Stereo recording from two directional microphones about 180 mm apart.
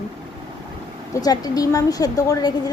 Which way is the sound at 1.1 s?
20° left (ahead or behind).